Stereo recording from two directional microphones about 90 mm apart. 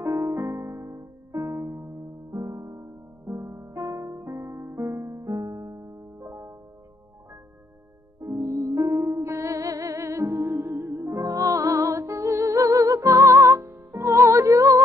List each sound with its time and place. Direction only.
0.0 s music: 35° right (ahead or behind)
8.2 s music: 35° right (ahead or behind)
11.1 s music: 40° right (ahead or behind)